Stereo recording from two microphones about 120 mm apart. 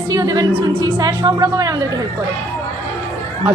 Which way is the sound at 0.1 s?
30° right (ahead or behind).